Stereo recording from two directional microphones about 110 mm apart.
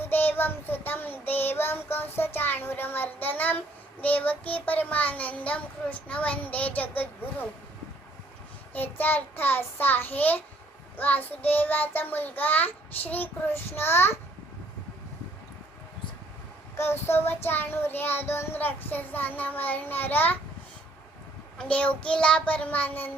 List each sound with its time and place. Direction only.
0.1 s child singing: 20° left (ahead or behind)
8.7 s child singing: 15° left (ahead or behind)
16.7 s child singing: 20° left (ahead or behind)
21.6 s child singing: 10° left (ahead or behind)